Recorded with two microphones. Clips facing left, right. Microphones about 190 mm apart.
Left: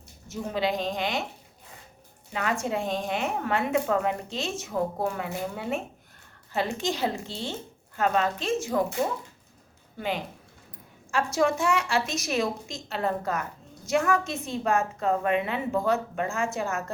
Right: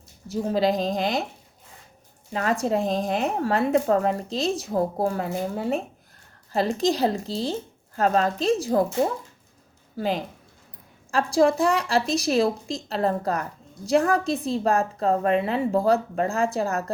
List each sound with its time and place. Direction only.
0.3 s a woman's voice: 35° right (ahead or behind)
2.3 s a woman's voice: 35° right (ahead or behind)
10.0 s a woman's voice: 35° right (ahead or behind)